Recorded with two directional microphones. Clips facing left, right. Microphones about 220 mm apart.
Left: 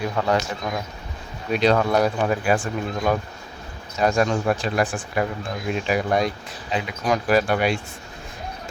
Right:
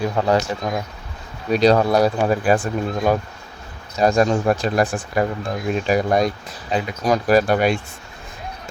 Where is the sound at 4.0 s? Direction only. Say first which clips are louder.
Right 4 dB; 35° right (ahead or behind).